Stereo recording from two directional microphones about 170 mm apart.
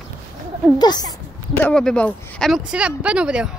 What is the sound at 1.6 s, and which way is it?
Speech, 5° left (ahead or behind).